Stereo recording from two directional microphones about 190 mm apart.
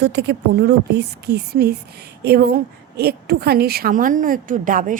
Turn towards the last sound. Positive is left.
turn(degrees=-45)  # may be behind; listen again after turning